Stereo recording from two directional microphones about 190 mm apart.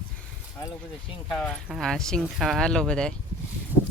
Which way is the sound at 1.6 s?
Centre (ahead or behind).